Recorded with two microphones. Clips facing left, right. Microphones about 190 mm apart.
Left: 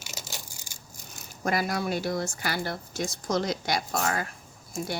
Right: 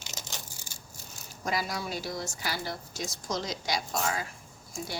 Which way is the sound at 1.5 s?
55° left (ahead or behind).